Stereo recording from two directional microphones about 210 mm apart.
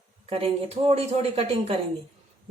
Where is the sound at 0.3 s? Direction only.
30° right (ahead or behind).